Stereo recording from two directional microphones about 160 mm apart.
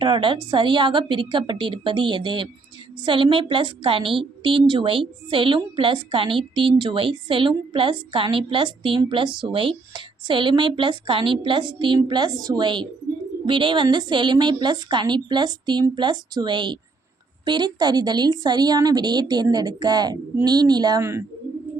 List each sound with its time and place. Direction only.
0.0 s a woman's voice: 30° right (ahead or behind)
21.0 s speech: 15° right (ahead or behind)